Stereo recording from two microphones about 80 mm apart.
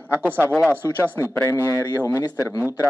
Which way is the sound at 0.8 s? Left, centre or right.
Left.